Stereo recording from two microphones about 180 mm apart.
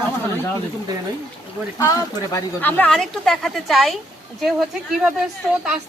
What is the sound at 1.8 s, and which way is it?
Speech, 20° left (ahead or behind).